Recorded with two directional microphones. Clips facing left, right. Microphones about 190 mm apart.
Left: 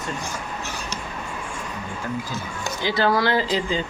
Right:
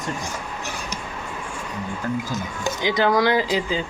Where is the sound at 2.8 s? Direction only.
15° right (ahead or behind).